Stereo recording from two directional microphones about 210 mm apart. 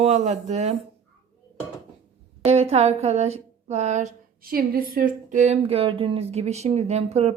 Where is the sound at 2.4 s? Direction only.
30° right (ahead or behind).